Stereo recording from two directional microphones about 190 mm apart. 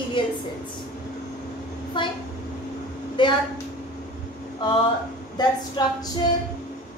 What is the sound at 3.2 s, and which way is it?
Speech, 25° left (ahead or behind).